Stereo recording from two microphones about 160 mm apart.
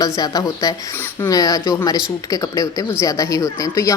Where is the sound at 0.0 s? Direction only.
25° left (ahead or behind).